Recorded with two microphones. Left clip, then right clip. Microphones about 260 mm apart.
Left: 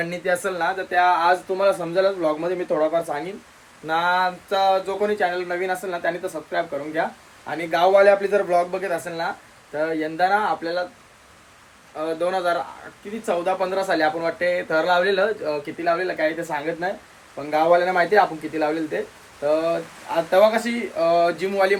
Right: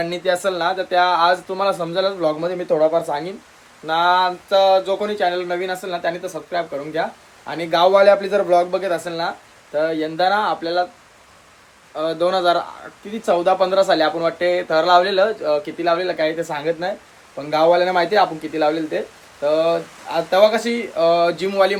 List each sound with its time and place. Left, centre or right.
0.0 s speech: centre
11.9 s speech: centre